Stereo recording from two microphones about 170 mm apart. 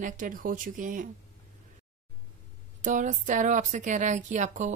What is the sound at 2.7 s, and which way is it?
A woman's voice, 45° right (ahead or behind).